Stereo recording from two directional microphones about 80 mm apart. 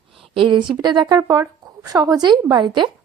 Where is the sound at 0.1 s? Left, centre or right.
Right.